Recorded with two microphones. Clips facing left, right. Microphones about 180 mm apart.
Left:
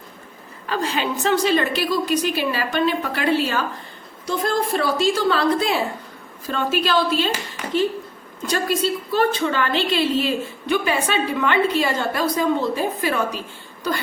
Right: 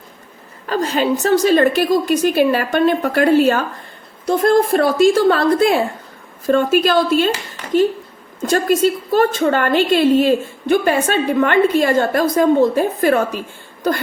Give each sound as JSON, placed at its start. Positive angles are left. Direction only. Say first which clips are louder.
{"t": 0.7, "sound": "a woman's voice", "louder": "right 6 dB", "side_deg": -45}
{"t": 8.4, "sound": "a woman's voice", "louder": "right 7 dB", "side_deg": -50}